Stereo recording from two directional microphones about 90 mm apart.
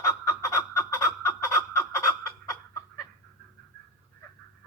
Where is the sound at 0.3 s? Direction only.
35° left (ahead or behind).